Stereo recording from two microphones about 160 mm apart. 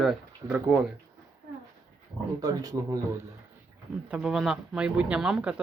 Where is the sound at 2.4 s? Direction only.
20° right (ahead or behind).